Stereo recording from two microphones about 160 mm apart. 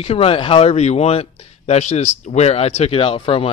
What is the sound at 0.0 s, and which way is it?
Speech, 40° left (ahead or behind).